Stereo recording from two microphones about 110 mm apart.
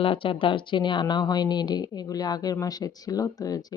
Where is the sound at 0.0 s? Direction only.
55° left (ahead or behind).